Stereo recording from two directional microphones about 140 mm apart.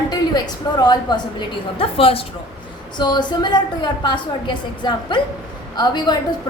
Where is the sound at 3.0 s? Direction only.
30° left (ahead or behind).